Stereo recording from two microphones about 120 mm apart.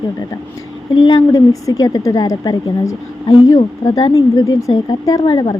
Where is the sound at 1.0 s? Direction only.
30° left (ahead or behind).